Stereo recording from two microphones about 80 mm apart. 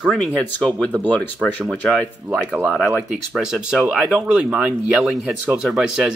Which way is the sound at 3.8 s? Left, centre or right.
Centre.